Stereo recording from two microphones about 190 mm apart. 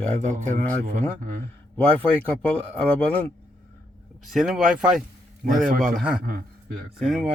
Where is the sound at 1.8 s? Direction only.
5° left (ahead or behind).